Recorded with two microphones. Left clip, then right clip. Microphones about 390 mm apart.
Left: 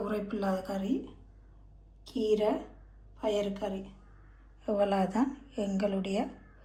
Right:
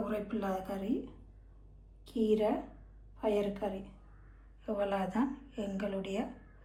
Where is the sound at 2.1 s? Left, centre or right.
Centre.